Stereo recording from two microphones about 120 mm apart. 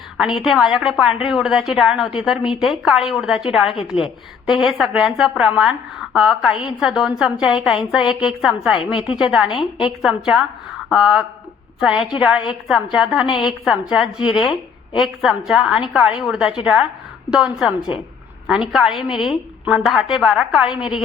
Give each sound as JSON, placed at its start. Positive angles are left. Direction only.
{"t": 0.4, "sound": "a woman's voice", "side_deg": 0}
{"t": 8.9, "sound": "a woman's voice", "side_deg": 45}
{"t": 9.6, "sound": "a woman's voice", "side_deg": -5}